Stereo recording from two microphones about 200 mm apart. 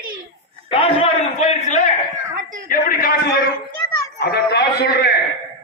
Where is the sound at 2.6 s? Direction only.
45° left (ahead or behind).